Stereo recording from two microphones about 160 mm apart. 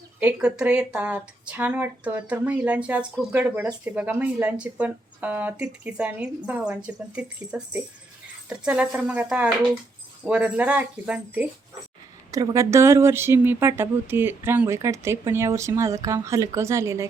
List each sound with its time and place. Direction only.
0.2 s speech: 5° right (ahead or behind)
10.2 s speech: 10° right (ahead or behind)
12.3 s speech: 20° right (ahead or behind)